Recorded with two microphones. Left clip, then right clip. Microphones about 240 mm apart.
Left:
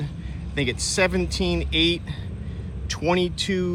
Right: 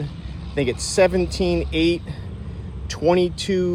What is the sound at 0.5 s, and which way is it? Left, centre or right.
Speech, right.